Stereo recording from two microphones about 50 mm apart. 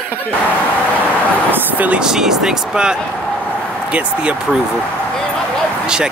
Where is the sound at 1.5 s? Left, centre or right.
Right.